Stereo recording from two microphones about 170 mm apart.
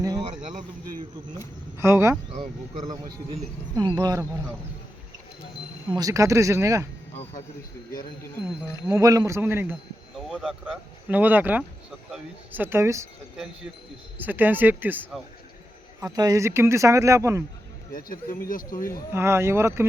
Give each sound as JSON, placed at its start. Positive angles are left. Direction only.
{"t": 0.0, "sound": "insect", "side_deg": -25}
{"t": 1.8, "sound": "speech", "side_deg": -15}
{"t": 3.9, "sound": "speech", "side_deg": -20}
{"t": 6.0, "sound": "speech", "side_deg": -20}
{"t": 8.9, "sound": "speech", "side_deg": -20}
{"t": 10.2, "sound": "speech", "side_deg": 0}
{"t": 14.2, "sound": "speech", "side_deg": -10}
{"t": 16.0, "sound": "speech", "side_deg": -20}
{"t": 17.9, "sound": "speech", "side_deg": 55}
{"t": 19.1, "sound": "speech", "side_deg": -15}